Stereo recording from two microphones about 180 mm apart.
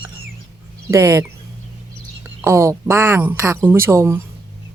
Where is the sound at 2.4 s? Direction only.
15° right (ahead or behind).